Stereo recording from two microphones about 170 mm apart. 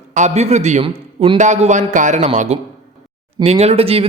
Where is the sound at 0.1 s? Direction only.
45° right (ahead or behind).